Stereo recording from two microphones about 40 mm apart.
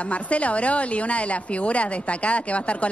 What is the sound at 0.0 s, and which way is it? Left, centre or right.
A woman's voice, left.